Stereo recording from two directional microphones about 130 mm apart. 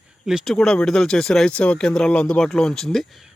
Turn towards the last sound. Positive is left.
turn(degrees=5)  # may be behind; listen again after turning